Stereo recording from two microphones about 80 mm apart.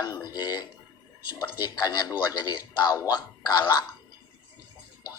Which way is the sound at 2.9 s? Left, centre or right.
Left.